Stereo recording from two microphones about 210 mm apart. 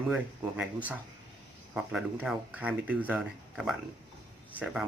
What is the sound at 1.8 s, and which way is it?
Speech, 5° right (ahead or behind).